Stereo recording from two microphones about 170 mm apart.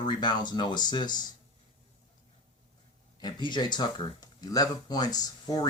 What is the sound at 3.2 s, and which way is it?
Speech, 25° left (ahead or behind).